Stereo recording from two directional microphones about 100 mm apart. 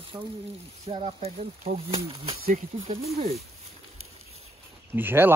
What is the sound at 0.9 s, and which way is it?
Speech, 70° right (ahead or behind).